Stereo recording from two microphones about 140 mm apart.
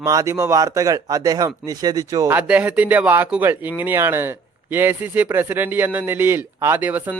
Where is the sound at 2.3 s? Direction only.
10° right (ahead or behind).